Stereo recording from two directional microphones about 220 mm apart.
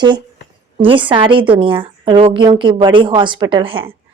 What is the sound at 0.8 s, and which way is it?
A woman's voice, 25° right (ahead or behind).